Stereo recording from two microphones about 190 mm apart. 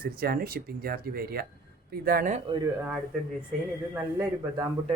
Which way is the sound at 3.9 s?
15° right (ahead or behind).